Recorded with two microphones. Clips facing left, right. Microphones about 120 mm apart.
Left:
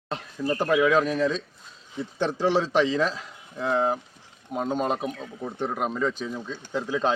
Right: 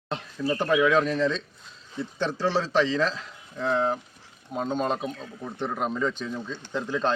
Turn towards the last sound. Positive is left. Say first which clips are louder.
# left 1 dB
turn(degrees=10)  # may be behind; listen again after turning